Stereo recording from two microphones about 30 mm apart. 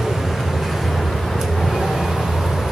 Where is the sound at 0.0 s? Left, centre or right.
Centre.